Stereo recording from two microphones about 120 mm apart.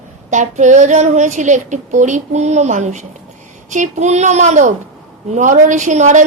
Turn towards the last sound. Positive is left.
turn(degrees=-90)